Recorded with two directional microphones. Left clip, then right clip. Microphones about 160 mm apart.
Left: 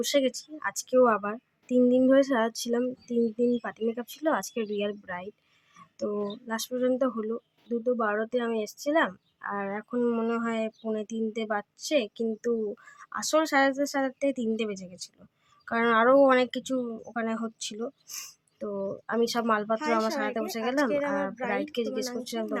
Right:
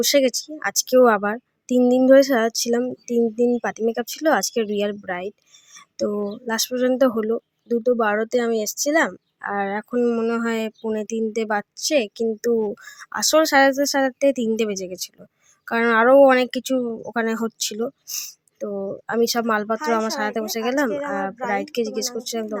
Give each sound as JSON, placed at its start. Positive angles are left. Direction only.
{"t": 0.0, "sound": "speech", "side_deg": -35}
{"t": 18.1, "sound": "speech", "side_deg": -25}